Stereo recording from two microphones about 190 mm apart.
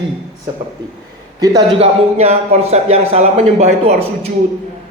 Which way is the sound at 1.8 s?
35° right (ahead or behind).